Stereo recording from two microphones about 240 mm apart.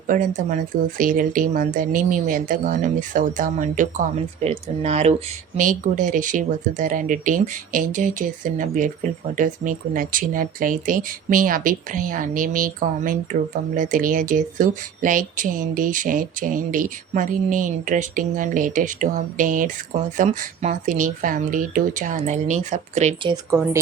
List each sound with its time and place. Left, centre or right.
0.1 s speech: right
23.3 s speech: centre